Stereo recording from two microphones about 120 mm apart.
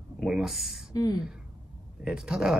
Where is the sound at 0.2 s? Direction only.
5° right (ahead or behind).